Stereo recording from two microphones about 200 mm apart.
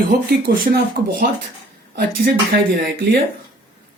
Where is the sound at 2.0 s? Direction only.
45° right (ahead or behind).